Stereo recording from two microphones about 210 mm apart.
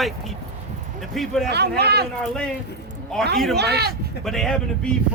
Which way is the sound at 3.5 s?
50° right (ahead or behind).